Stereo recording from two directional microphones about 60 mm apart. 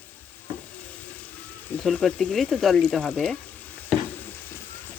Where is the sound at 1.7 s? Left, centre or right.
Left.